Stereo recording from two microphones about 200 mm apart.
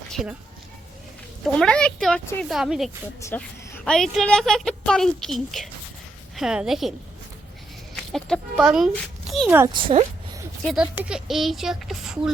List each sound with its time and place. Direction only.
0.1 s speech: centre (ahead or behind)
1.5 s a woman's voice: 5° left (ahead or behind)
3.2 s a woman's voice: 15° left (ahead or behind); by 6.9 s centre (ahead or behind)
8.1 s a woman's voice: centre (ahead or behind)
9.8 s speech: 30° right (ahead or behind)
10.6 s a woman's voice: centre (ahead or behind)